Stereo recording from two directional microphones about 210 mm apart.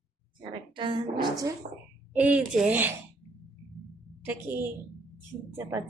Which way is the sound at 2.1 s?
5° right (ahead or behind).